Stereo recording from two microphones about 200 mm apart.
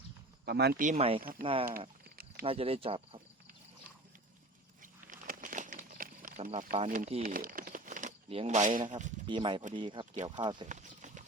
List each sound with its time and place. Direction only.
0.4 s speech: 55° right (ahead or behind); by 1.2 s 30° right (ahead or behind)
1.2 s speech: 45° right (ahead or behind)
2.4 s speech: 30° right (ahead or behind)
4.8 s a sound: 45° right (ahead or behind)
6.8 s speech: 40° right (ahead or behind)
9.2 s speech: 25° right (ahead or behind)
10.7 s clip-clop: 35° right (ahead or behind)